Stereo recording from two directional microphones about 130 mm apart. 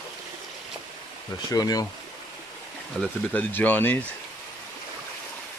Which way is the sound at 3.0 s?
10° left (ahead or behind).